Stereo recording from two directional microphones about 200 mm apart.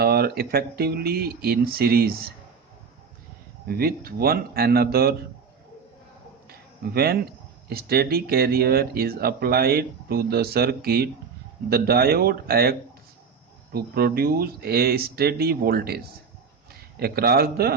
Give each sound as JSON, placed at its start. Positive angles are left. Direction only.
{"t": 0.0, "sound": "speech", "side_deg": -50}
{"t": 3.7, "sound": "speech", "side_deg": -50}
{"t": 6.5, "sound": "a sound", "side_deg": -50}
{"t": 7.7, "sound": "speech", "side_deg": -50}
{"t": 13.7, "sound": "speech", "side_deg": -50}
{"t": 17.0, "sound": "speech", "side_deg": -50}